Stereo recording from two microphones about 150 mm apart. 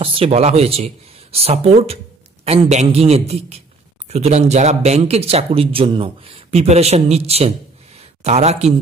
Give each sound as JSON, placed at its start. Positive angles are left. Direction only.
{"t": 0.0, "sound": "speech", "side_deg": -40}